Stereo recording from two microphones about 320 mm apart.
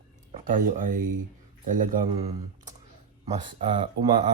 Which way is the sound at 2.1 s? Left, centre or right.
Centre.